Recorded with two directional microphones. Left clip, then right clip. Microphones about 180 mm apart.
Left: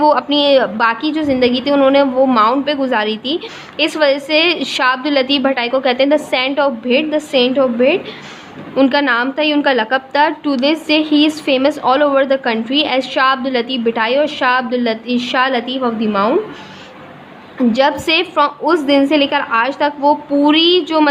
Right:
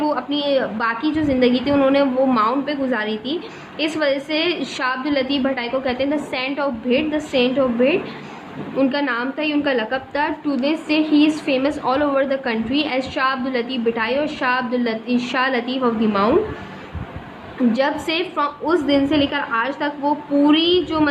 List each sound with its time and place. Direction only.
0.0 s a woman's voice: 55° left (ahead or behind); by 7.9 s 40° left (ahead or behind)
8.7 s a woman's voice: 50° left (ahead or behind); by 16.3 s 30° left (ahead or behind)
17.7 s a woman's voice: 45° left (ahead or behind)